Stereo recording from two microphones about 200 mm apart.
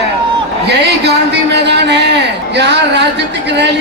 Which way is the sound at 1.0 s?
55° right (ahead or behind).